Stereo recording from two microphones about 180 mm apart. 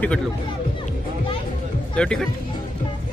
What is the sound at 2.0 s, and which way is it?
Speech, 5° left (ahead or behind).